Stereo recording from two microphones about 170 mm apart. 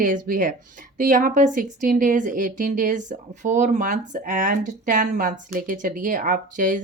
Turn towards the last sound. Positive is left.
turn(degrees=-50)  # may be behind; listen again after turning